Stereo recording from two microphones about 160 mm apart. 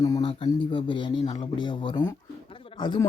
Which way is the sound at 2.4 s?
35° left (ahead or behind).